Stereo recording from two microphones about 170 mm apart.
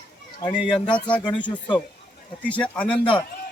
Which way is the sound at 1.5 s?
25° left (ahead or behind).